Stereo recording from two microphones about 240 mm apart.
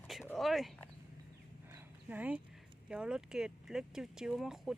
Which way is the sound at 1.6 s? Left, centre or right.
Centre.